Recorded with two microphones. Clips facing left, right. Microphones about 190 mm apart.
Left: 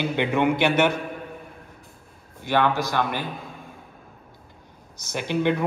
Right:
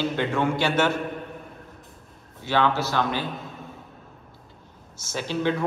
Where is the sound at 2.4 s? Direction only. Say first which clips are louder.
Left 1 dB; 15° left (ahead or behind).